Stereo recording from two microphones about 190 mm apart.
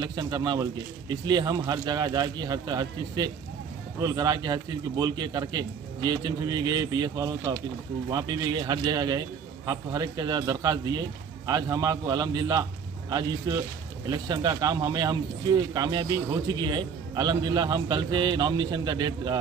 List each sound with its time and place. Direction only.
0.0 s speech: 20° right (ahead or behind)